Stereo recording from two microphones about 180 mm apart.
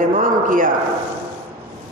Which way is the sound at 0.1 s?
50° right (ahead or behind).